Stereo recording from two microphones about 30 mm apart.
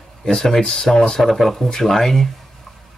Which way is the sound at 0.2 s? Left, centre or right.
Centre.